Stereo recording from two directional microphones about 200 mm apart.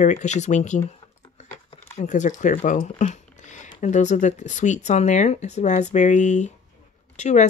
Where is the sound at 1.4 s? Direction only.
35° left (ahead or behind).